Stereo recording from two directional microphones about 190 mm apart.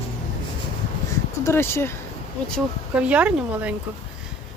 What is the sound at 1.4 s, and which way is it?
Speech, 15° left (ahead or behind).